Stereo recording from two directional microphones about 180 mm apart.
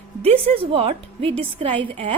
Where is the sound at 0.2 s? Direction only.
30° right (ahead or behind).